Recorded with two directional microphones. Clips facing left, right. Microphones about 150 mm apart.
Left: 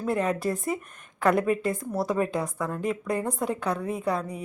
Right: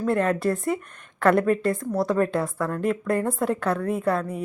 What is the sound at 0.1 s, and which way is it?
A woman's voice, centre (ahead or behind).